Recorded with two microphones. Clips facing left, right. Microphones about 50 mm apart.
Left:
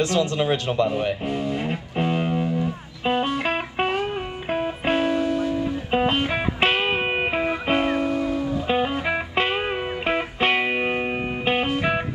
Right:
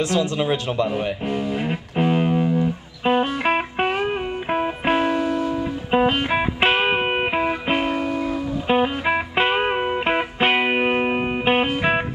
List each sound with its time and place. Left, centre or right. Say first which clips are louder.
0.0 s a man's voice: even; right
1.2 s music: right 2 dB; centre; by 4.7 s right
4.8 s music: right 1 dB; centre
8.6 s music: right 6 dB; centre